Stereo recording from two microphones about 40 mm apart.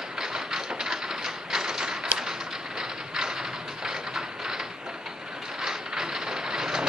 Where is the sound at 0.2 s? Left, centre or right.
Centre.